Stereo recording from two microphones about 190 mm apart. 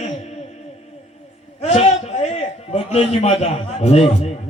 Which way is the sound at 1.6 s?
35° left (ahead or behind).